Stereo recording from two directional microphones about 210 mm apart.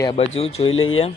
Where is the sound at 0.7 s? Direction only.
70° left (ahead or behind).